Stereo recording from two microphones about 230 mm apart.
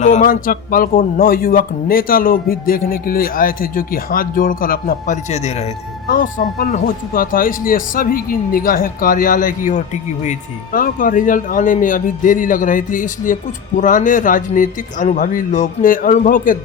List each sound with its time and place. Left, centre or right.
0.0 s speech: left